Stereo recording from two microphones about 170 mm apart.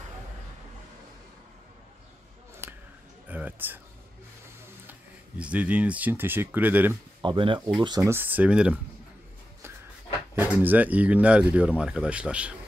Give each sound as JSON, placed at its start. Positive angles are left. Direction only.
{"t": 3.3, "sound": "speech", "side_deg": -10}
{"t": 5.4, "sound": "speech", "side_deg": -5}
{"t": 7.2, "sound": "speech", "side_deg": -30}
{"t": 10.3, "sound": "speech", "side_deg": -10}